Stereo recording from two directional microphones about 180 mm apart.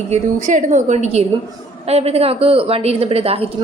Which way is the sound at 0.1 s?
45° right (ahead or behind).